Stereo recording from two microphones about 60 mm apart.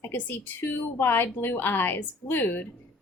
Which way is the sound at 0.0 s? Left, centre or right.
Left.